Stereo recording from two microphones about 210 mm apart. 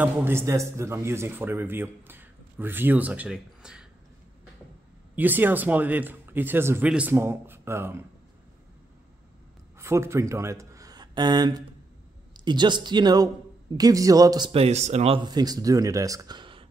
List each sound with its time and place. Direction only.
0.0 s a man's voice: 10° right (ahead or behind)
5.1 s a man's voice: 10° right (ahead or behind)
9.8 s a man's voice: 15° right (ahead or behind)